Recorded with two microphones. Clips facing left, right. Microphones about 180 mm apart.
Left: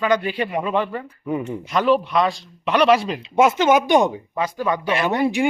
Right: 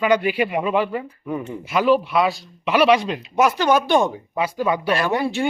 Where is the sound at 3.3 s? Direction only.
25° left (ahead or behind).